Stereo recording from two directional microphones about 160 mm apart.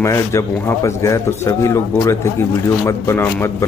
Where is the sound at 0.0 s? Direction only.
20° left (ahead or behind).